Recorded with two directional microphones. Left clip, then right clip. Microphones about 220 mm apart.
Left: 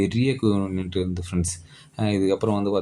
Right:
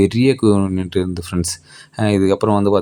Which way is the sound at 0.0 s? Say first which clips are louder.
Right 9 dB; 30° right (ahead or behind).